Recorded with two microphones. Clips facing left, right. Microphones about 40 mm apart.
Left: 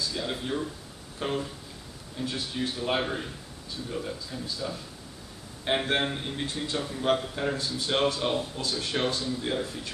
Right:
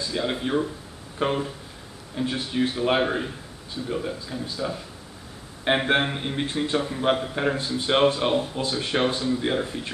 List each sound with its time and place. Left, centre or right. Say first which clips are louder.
0.0 s a man's voice: right 5 dB; right